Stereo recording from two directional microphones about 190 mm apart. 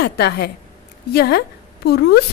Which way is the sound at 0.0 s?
60° left (ahead or behind).